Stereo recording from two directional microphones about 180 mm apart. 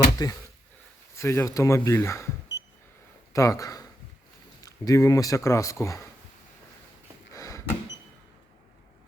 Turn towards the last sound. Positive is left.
turn(degrees=15)  # may be behind; listen again after turning